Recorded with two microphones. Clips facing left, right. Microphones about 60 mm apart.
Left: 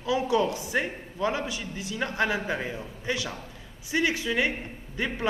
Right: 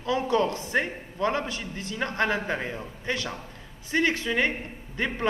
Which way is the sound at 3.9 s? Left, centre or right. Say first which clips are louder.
Right 1 dB; centre.